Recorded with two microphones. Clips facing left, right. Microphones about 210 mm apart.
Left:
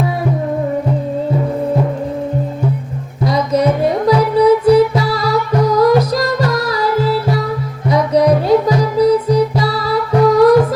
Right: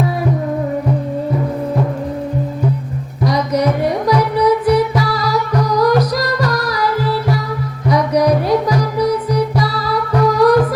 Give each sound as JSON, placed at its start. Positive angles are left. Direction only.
{"t": 3.2, "sound": "music", "side_deg": 25}